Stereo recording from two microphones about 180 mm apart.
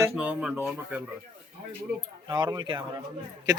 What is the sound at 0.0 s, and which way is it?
Speech, 5° right (ahead or behind).